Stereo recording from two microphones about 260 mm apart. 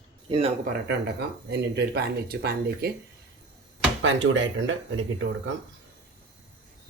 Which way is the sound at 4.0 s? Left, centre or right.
Right.